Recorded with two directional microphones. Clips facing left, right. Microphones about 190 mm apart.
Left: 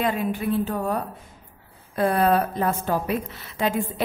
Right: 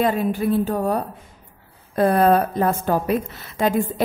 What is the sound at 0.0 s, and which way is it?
A woman's voice, 40° right (ahead or behind).